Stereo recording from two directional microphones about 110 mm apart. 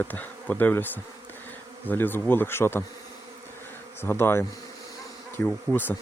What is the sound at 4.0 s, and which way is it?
Speech, 20° left (ahead or behind).